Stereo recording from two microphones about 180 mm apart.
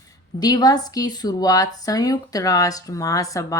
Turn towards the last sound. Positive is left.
turn(degrees=20)  # may be behind; listen again after turning